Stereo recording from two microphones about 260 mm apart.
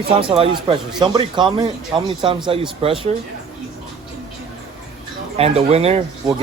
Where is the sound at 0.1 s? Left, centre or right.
Right.